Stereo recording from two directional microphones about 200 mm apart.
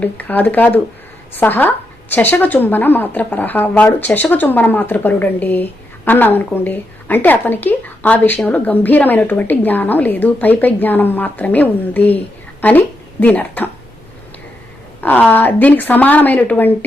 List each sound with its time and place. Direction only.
0.0 s a woman's voice: 10° left (ahead or behind)
15.0 s a woman's voice: 10° left (ahead or behind)